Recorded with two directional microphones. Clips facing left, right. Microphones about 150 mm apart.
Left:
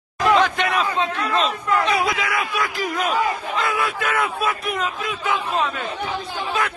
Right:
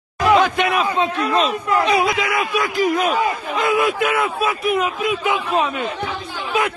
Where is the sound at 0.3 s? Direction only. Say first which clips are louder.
Right 3 dB; 10° right (ahead or behind).